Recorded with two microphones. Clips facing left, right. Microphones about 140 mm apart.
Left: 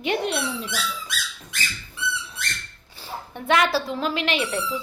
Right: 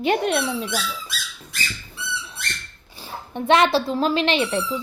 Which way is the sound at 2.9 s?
15° right (ahead or behind).